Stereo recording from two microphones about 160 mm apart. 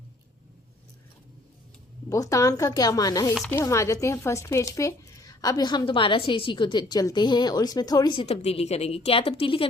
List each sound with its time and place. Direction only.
2.0 s a woman's voice: 20° left (ahead or behind); by 9.6 s 35° left (ahead or behind)